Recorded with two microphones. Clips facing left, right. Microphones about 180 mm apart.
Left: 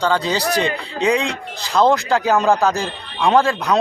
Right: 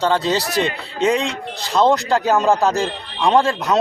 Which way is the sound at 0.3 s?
Centre (ahead or behind).